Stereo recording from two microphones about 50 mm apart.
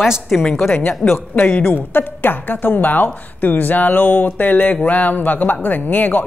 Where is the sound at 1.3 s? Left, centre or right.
Left.